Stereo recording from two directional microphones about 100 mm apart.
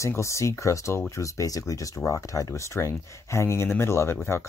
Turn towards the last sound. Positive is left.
turn(degrees=25)  # may be behind; listen again after turning